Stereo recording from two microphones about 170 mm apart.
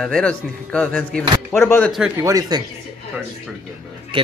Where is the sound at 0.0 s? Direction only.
5° left (ahead or behind).